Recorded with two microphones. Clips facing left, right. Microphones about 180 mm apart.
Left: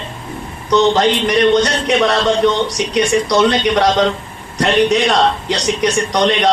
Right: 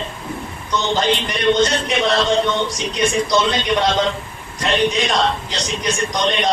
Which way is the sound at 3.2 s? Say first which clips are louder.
Left 5 dB; 75° left (ahead or behind).